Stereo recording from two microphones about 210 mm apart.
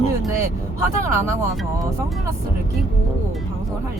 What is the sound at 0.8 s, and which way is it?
Speech, 15° right (ahead or behind).